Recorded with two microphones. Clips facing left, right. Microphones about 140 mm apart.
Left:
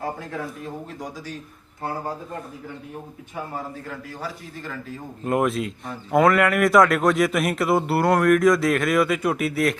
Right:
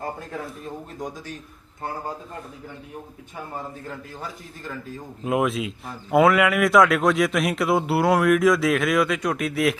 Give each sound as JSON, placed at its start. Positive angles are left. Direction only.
{"t": 5.2, "sound": "speech", "side_deg": 0}